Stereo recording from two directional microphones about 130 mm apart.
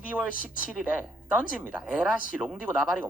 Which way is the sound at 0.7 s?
10° right (ahead or behind).